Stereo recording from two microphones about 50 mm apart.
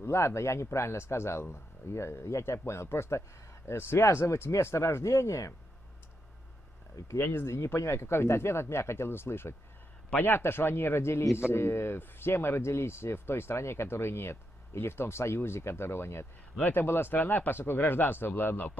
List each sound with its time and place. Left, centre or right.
0.0 s speech: left
7.2 s speech: left
7.5 s speech: left
10.1 s speech: left